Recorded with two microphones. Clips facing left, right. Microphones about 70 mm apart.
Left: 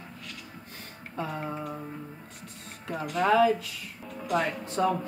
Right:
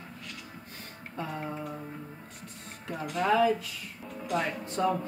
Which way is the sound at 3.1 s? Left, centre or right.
Left.